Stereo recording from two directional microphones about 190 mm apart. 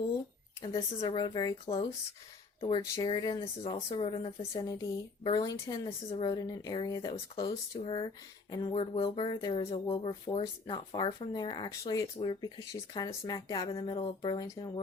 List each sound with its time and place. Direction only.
0.6 s a woman's voice: 25° left (ahead or behind)
1.6 s a woman's voice: 30° left (ahead or behind)
4.5 s a woman's voice: 15° left (ahead or behind)